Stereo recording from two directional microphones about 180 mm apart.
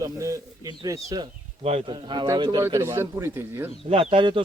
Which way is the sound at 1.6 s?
30° right (ahead or behind).